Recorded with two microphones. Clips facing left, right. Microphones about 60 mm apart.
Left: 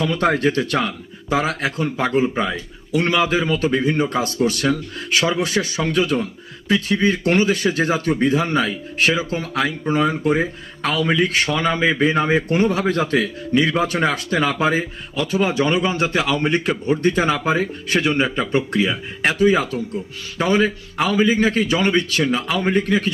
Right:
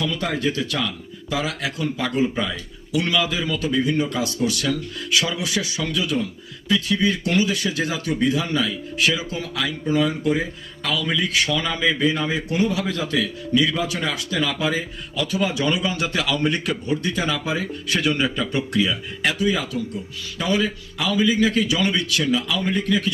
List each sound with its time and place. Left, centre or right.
0.0 s a man's voice: left